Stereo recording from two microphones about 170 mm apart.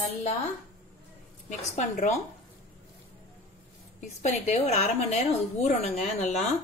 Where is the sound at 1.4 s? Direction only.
45° left (ahead or behind).